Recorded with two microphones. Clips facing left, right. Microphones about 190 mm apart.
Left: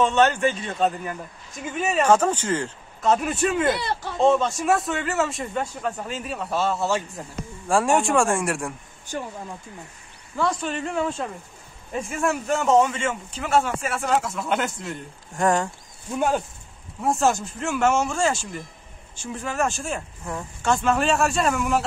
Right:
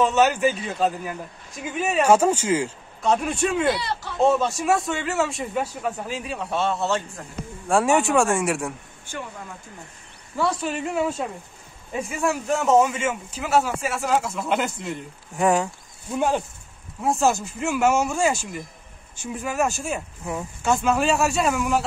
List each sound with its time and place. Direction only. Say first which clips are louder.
0.0 s speech: even; 5° right (ahead or behind)
3.1 s speech: even; 5° left (ahead or behind)
9.1 s speech: left 3 dB; 40° left (ahead or behind)
10.3 s speech: right 1 dB; 5° right (ahead or behind)